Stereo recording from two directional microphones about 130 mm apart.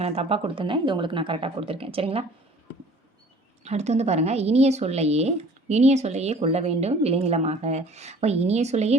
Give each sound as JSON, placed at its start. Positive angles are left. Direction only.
{"t": 0.0, "sound": "speech", "side_deg": -50}
{"t": 3.6, "sound": "a woman's voice", "side_deg": -60}